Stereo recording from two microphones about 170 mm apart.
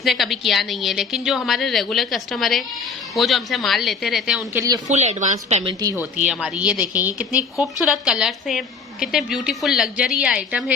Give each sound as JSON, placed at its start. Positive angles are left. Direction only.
{"t": 0.0, "sound": "a woman's voice", "side_deg": 0}
{"t": 4.5, "sound": "speech", "side_deg": -20}
{"t": 4.9, "sound": "a woman's voice", "side_deg": -40}
{"t": 5.8, "sound": "speech", "side_deg": -20}
{"t": 6.2, "sound": "a woman's voice", "side_deg": -5}